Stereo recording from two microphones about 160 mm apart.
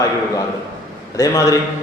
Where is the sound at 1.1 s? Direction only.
20° left (ahead or behind).